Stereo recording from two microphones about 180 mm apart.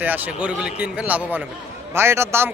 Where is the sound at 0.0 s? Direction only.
10° right (ahead or behind).